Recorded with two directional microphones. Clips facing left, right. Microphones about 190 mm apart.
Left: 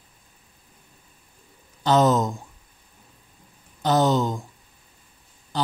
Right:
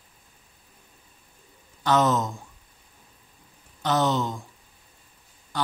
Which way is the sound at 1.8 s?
30° left (ahead or behind).